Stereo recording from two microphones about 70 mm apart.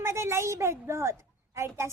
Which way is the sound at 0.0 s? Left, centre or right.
Right.